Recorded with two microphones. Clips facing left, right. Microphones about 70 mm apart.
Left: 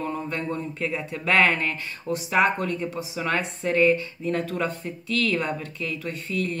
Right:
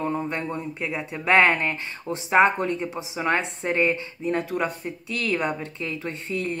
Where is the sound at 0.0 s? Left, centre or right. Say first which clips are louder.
Right 2 dB; right.